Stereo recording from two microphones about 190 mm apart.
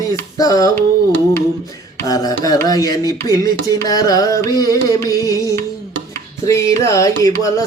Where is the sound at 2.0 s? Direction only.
20° left (ahead or behind).